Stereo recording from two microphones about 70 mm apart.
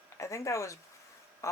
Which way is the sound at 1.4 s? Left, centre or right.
Left.